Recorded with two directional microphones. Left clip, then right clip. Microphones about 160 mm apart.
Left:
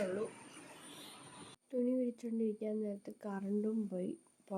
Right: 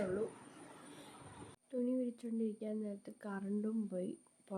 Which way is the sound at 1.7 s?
15° left (ahead or behind).